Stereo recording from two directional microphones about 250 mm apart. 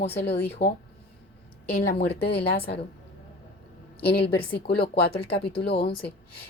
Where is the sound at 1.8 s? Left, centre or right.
Left.